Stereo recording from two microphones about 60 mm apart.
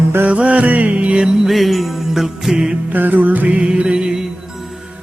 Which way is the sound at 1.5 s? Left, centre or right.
Centre.